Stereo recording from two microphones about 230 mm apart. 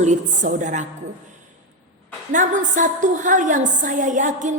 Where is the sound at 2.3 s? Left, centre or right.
Right.